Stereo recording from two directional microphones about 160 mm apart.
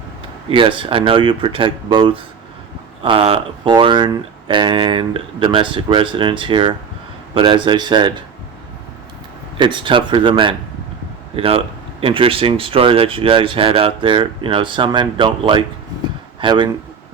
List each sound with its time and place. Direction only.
0.5 s speech: 30° right (ahead or behind)
9.6 s speech: 30° right (ahead or behind)